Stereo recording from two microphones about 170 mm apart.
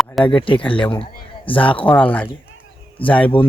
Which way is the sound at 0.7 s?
10° left (ahead or behind).